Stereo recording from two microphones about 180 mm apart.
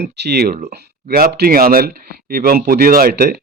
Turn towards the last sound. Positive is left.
turn(degrees=-60)  # may be behind; listen again after turning